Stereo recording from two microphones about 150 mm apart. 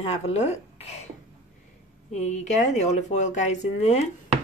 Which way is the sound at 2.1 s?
50° left (ahead or behind).